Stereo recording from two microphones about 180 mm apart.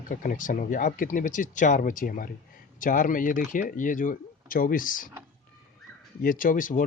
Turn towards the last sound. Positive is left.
turn(degrees=50)  # may be behind; listen again after turning